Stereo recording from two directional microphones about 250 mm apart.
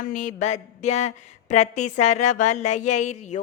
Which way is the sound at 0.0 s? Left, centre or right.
Left.